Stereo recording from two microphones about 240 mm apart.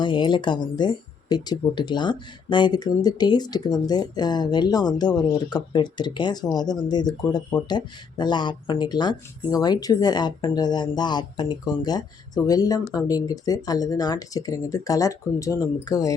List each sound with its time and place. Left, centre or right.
0.0 s speech: centre